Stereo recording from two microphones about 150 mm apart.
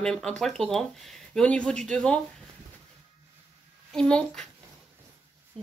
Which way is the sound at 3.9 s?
5° left (ahead or behind).